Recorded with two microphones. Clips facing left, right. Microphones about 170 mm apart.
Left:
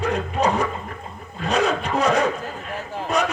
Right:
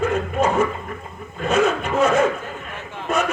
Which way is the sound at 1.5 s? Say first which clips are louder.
Right 2 dB; 35° left (ahead or behind).